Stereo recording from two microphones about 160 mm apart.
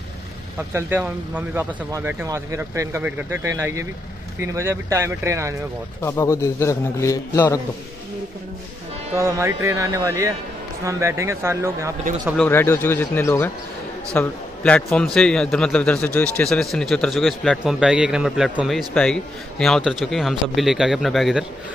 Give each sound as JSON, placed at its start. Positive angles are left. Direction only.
{"t": 0.7, "sound": "speech", "side_deg": -10}
{"t": 6.0, "sound": "a man's voice", "side_deg": 15}
{"t": 9.1, "sound": "speech", "side_deg": -20}
{"t": 12.4, "sound": "a man's voice", "side_deg": 15}